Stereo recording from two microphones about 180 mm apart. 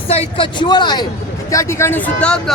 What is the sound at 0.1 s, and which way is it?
Speech, 30° left (ahead or behind).